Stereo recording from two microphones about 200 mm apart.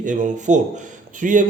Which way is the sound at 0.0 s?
40° right (ahead or behind).